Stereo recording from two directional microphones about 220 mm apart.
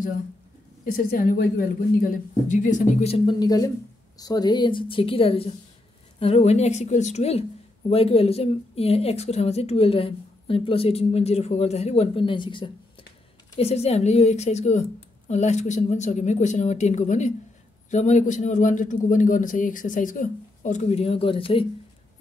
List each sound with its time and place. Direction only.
0.9 s a man's voice: 40° left (ahead or behind); by 21.6 s 25° left (ahead or behind)